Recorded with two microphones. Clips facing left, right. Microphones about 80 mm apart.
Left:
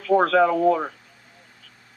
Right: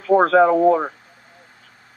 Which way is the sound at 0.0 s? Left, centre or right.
Right.